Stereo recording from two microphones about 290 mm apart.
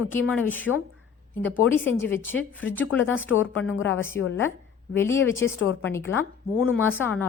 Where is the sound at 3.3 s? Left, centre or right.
Left.